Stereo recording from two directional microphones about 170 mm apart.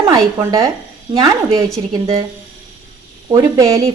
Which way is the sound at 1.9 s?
20° right (ahead or behind).